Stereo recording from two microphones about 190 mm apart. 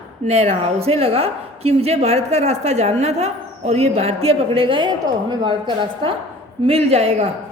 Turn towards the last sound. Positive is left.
turn(degrees=-35)  # may be behind; listen again after turning